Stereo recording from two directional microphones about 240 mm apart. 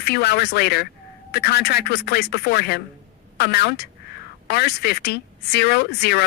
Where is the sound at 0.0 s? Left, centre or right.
Left.